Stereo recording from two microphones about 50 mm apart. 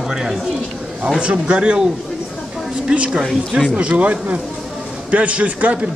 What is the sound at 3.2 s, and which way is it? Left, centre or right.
Speech, centre.